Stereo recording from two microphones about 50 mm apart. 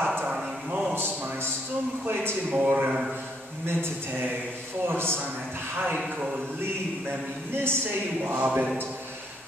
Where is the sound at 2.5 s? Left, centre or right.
Right.